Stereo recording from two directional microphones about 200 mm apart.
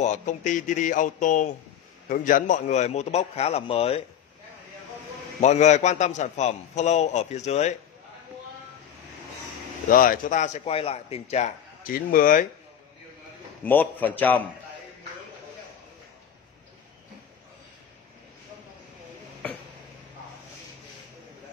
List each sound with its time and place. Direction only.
0.0 s a man's voice: 40° left (ahead or behind)
5.4 s a man's voice: 35° left (ahead or behind)
9.8 s a man's voice: 45° left (ahead or behind)
13.7 s a man's voice: 10° left (ahead or behind)